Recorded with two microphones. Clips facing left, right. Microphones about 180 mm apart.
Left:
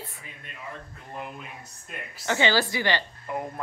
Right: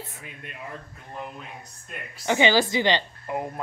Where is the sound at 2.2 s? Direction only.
15° right (ahead or behind).